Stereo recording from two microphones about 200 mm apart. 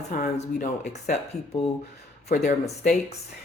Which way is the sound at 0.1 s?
40° left (ahead or behind).